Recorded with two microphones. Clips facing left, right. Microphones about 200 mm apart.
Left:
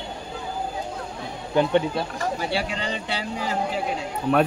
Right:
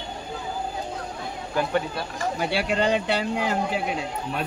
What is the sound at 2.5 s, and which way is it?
Speech, 60° right (ahead or behind).